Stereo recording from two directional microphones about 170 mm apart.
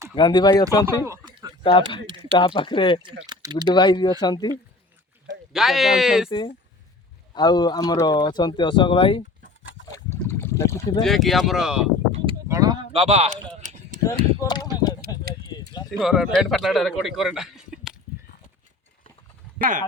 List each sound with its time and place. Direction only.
0.2 s speech: 25° left (ahead or behind)
1.0 s a sound: 20° right (ahead or behind)
1.6 s speech: 30° left (ahead or behind)
3.0 s speech: 25° right (ahead or behind)
3.7 s speech: 25° left (ahead or behind)
5.5 s a man's voice: centre (ahead or behind)
7.3 s speech: 25° left (ahead or behind)
9.9 s a sound: 15° left (ahead or behind)
11.0 s a man's voice: centre (ahead or behind)
12.5 s a sound: 20° right (ahead or behind)
12.9 s speech: 35° right (ahead or behind)
13.6 s a sound: 50° right (ahead or behind)
14.3 s speech: 25° left (ahead or behind)
15.9 s a man's voice: centre (ahead or behind)